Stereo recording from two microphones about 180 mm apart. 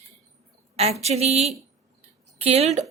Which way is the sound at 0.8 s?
35° right (ahead or behind).